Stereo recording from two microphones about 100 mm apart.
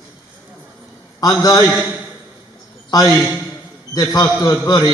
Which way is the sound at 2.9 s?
40° left (ahead or behind).